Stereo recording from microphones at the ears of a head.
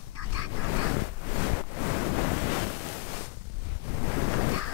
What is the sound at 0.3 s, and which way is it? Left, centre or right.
Waves, left.